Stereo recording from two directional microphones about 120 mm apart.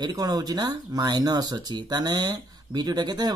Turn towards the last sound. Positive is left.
turn(degrees=-35)  # may be behind; listen again after turning